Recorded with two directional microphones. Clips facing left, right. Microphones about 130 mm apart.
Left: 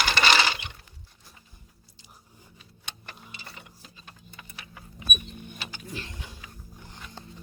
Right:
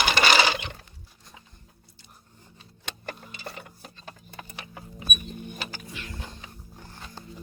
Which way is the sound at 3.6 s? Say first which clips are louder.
Right 5 dB; 50° right (ahead or behind).